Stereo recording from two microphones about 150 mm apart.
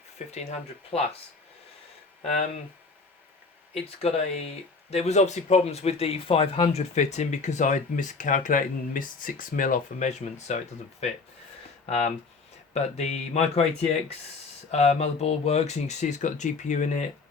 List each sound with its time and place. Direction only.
0.3 s speech: 45° left (ahead or behind)
3.8 s speech: 40° left (ahead or behind)
12.7 s speech: 45° left (ahead or behind)
14.7 s speech: 45° left (ahead or behind)